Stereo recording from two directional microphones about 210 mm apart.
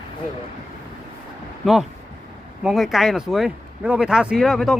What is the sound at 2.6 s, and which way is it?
Speech, centre (ahead or behind).